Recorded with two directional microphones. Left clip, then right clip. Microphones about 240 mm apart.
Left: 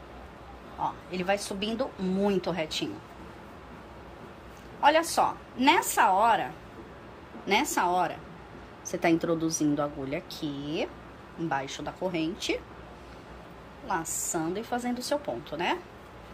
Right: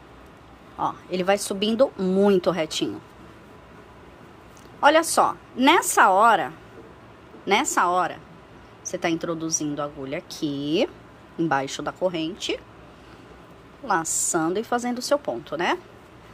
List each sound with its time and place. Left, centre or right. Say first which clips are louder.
1.1 s a woman's voice: right 8 dB; right
4.8 s a woman's voice: right 5 dB; right; by 10.2 s centre
10.4 s a woman's voice: right 12 dB; right
12.0 s a woman's voice: right 5 dB; centre
13.8 s a woman's voice: right 8 dB; centre